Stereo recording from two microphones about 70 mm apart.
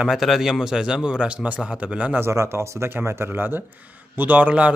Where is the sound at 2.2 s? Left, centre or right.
Right.